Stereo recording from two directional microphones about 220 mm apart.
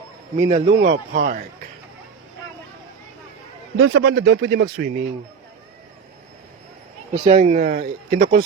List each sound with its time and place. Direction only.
0.3 s a man's voice: 30° right (ahead or behind)
0.8 s speech: 40° right (ahead or behind)
3.8 s speech: 60° right (ahead or behind)
7.3 s speech: 30° right (ahead or behind)